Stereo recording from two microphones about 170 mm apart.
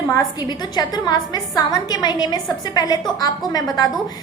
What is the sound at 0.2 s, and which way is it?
A woman's voice, 25° left (ahead or behind).